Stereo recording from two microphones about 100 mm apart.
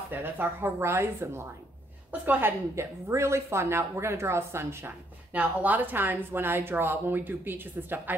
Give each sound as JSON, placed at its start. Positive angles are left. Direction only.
{"t": 0.1, "sound": "speech", "side_deg": -20}